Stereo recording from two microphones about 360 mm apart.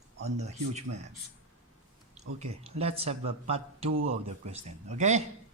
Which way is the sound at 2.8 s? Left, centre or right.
Centre.